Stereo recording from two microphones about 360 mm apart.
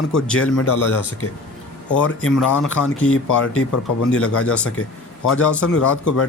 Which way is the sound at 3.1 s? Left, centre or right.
Left.